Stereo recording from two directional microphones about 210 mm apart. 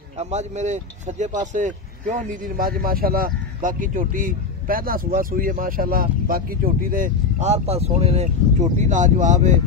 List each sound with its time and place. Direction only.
0.2 s speech: 35° right (ahead or behind)